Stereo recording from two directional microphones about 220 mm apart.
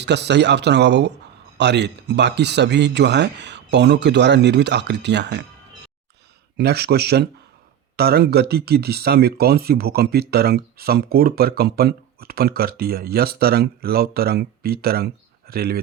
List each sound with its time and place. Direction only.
0.0 s speech: 50° right (ahead or behind)
6.6 s speech: 45° right (ahead or behind)